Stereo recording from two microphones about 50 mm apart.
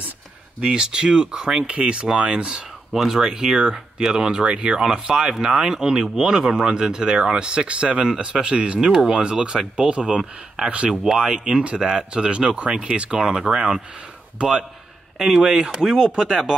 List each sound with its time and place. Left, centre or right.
0.6 s speech: centre
2.9 s speech: centre
15.1 s speech: centre